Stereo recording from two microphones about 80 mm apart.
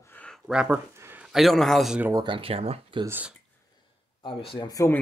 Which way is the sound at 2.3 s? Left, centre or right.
Right.